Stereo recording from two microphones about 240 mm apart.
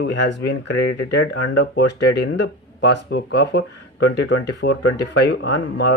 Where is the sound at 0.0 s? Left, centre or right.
Left.